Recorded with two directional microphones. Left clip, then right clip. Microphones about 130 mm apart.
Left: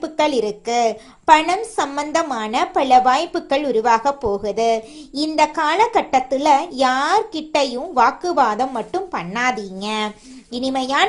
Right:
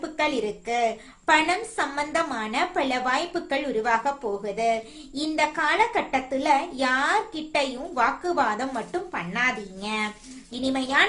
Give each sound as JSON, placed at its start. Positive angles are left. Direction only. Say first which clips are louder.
{"t": 0.0, "sound": "a woman's voice", "louder": "left 7 dB", "side_deg": 50}